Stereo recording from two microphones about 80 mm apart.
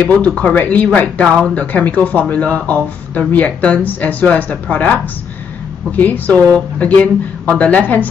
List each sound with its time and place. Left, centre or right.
0.0 s speech: centre